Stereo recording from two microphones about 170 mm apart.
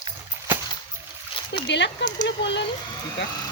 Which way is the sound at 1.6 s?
90° left.